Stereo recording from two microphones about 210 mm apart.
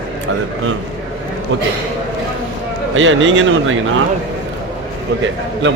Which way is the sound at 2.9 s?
65° right (ahead or behind).